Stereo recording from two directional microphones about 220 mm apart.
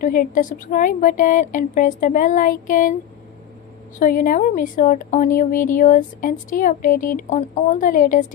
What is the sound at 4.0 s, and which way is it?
Speech, 40° left (ahead or behind).